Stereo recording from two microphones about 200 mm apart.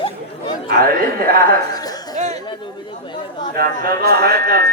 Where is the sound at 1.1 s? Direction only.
50° right (ahead or behind).